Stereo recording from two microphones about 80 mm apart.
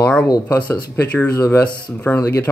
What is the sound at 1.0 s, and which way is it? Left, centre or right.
Speech, left.